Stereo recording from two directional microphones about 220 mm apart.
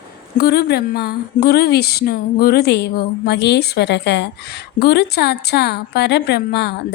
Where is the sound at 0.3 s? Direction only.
45° left (ahead or behind).